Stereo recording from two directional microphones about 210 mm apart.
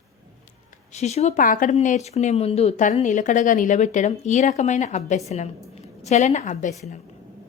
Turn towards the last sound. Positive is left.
turn(degrees=35)  # may be behind; listen again after turning